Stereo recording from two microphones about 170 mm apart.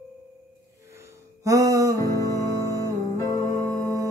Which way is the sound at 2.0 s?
20° left (ahead or behind).